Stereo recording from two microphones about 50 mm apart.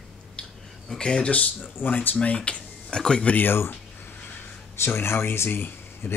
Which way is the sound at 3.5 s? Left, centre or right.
Left.